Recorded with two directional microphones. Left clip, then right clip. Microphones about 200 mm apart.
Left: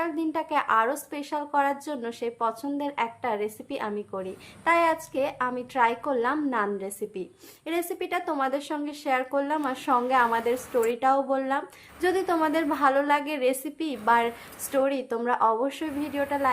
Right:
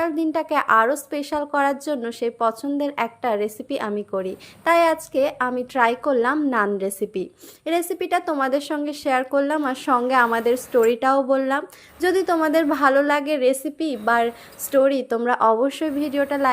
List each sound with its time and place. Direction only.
0.0 s a woman's voice: 30° right (ahead or behind)